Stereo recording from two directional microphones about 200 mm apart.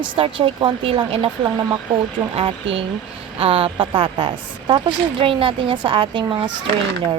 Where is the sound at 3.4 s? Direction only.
30° right (ahead or behind).